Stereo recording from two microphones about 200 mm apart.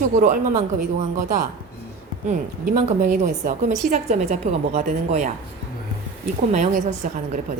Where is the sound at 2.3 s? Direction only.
40° right (ahead or behind).